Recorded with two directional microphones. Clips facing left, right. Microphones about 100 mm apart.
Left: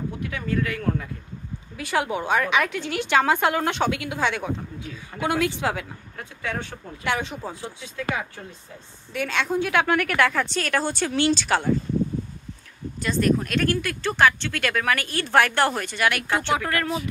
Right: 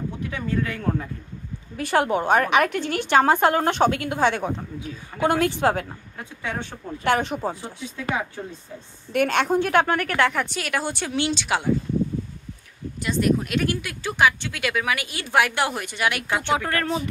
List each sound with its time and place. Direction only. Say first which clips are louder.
0.3 s a woman's voice: even; 25° right (ahead or behind)
1.8 s a woman's voice: right 4 dB; 45° right (ahead or behind)
7.1 s a woman's voice: right 5 dB; 50° right (ahead or behind)
9.1 s a woman's voice: right 5 dB; 55° right (ahead or behind); by 11.6 s 15° right (ahead or behind)
13.0 s speech: even; 15° right (ahead or behind)